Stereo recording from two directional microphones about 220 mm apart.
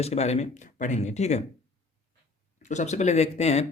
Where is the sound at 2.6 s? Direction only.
30° left (ahead or behind).